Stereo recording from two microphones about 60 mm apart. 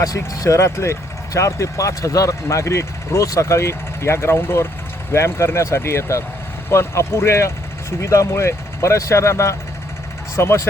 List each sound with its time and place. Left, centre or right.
0.3 s speech: left